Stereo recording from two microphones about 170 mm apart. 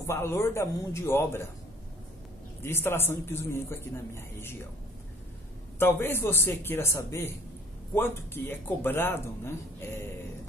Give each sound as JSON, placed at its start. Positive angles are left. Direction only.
{"t": 0.0, "sound": "speech", "side_deg": 15}
{"t": 2.6, "sound": "speech", "side_deg": 15}
{"t": 5.8, "sound": "speech", "side_deg": 15}